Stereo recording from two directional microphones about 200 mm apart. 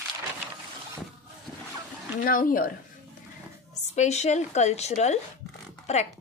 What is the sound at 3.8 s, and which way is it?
A woman's voice, 35° left (ahead or behind).